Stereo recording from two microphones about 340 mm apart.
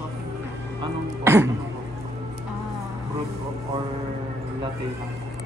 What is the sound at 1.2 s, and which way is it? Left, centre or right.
Music, centre.